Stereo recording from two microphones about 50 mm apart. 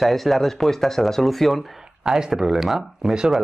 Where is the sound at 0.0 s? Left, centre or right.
Centre.